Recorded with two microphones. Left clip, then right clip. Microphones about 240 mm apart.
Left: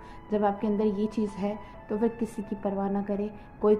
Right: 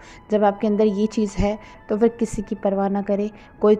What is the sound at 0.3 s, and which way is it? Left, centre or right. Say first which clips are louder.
A woman's voice: right 8 dB; right.